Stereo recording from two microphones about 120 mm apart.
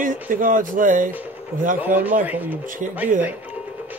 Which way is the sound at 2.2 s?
15° right (ahead or behind).